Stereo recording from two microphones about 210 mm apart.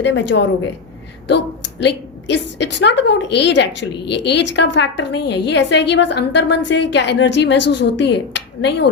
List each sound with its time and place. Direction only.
0.0 s a woman's voice: 60° left (ahead or behind)